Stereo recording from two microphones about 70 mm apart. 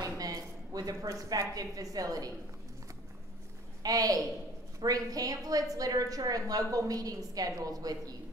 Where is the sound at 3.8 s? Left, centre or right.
Right.